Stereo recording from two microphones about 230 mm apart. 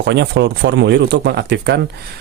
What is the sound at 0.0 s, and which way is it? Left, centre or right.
Speech, right.